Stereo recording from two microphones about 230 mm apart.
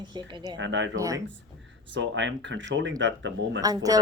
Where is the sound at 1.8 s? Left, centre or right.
Right.